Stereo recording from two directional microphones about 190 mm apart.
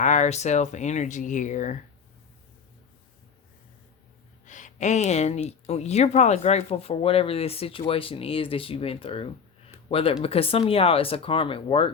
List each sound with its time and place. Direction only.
0.0 s speech: 40° left (ahead or behind)
4.4 s speech: 40° left (ahead or behind)